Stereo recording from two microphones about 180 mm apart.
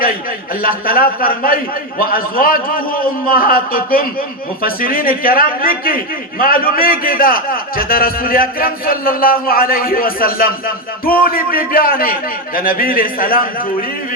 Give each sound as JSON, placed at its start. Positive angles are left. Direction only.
{"t": 0.6, "sound": "a man's voice", "side_deg": 55}